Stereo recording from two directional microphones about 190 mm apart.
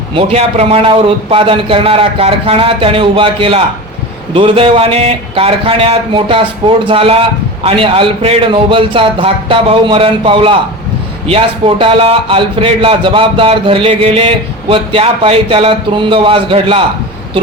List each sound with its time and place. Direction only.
0.1 s speech: 30° right (ahead or behind)